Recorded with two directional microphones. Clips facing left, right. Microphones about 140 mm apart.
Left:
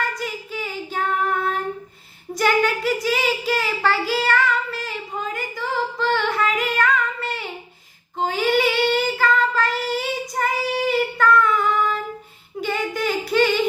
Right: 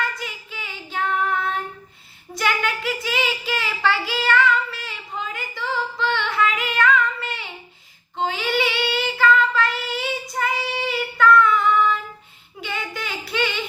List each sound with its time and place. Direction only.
0.1 s female singing: 40° left (ahead or behind)
2.3 s child singing: 40° left (ahead or behind)
12.5 s a sound: 40° left (ahead or behind)